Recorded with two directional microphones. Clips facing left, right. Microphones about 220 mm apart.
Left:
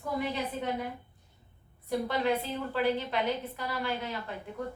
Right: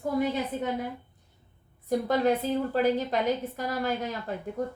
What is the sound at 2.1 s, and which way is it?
A woman's voice, 45° right (ahead or behind).